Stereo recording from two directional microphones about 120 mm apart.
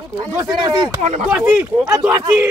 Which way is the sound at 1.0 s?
75° right (ahead or behind).